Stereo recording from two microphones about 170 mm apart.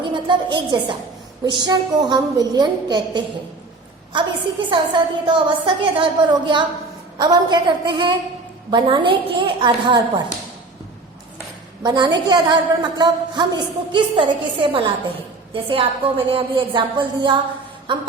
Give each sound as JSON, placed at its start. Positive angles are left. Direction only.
{"t": 0.0, "sound": "a woman's voice", "side_deg": -30}
{"t": 4.7, "sound": "a woman's voice", "side_deg": -30}
{"t": 11.8, "sound": "a woman's voice", "side_deg": -25}